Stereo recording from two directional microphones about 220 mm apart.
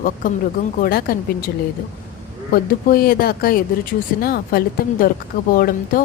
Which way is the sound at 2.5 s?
40° left (ahead or behind).